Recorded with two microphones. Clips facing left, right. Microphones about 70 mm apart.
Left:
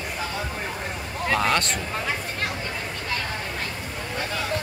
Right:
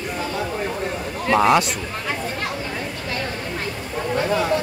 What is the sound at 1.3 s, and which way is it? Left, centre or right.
Speech, centre.